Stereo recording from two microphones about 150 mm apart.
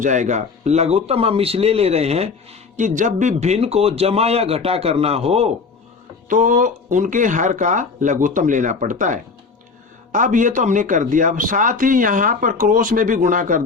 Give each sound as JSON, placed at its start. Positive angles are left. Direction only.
{"t": 0.0, "sound": "a man's voice", "side_deg": -55}
{"t": 2.7, "sound": "a man's voice", "side_deg": -55}
{"t": 6.2, "sound": "a man's voice", "side_deg": -60}